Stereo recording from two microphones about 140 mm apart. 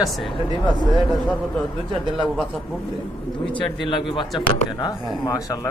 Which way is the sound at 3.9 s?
35° left (ahead or behind).